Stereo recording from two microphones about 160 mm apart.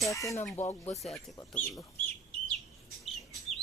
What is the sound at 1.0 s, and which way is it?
Speech, centre (ahead or behind).